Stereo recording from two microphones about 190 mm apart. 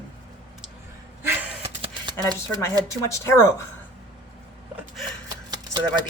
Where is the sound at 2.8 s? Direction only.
15° left (ahead or behind).